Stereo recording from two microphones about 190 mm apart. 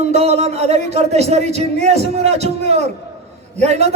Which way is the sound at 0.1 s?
35° right (ahead or behind).